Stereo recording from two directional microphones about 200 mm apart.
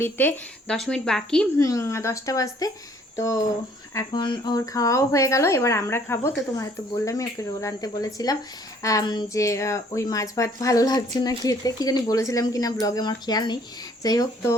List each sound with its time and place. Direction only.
0.0 s a woman's voice: 10° left (ahead or behind)
1.5 s speech: 15° left (ahead or behind)
3.9 s speech: 20° left (ahead or behind)